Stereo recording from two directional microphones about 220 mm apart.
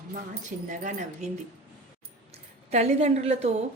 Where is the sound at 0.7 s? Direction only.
35° right (ahead or behind).